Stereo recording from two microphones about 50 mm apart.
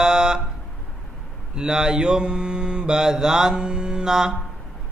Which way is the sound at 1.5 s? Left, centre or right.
Centre.